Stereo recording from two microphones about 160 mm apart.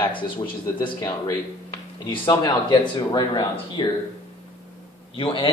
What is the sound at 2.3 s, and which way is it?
A man's voice, 25° left (ahead or behind).